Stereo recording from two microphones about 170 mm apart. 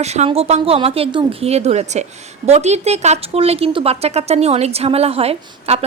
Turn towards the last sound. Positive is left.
turn(degrees=-35)  # may be behind; listen again after turning